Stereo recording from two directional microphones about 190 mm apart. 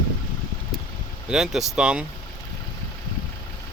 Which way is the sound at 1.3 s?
5° right (ahead or behind).